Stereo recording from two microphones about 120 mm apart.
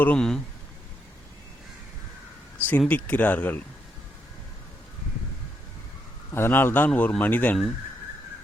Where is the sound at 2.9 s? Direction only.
15° left (ahead or behind).